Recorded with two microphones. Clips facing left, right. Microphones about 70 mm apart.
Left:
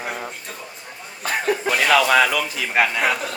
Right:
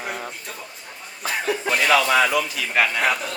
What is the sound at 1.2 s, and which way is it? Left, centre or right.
A man's voice, left.